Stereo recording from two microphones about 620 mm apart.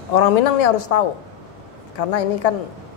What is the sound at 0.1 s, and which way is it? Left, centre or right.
A woman's voice, left.